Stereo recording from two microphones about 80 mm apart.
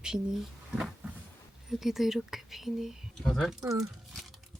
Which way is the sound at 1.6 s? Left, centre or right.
Centre.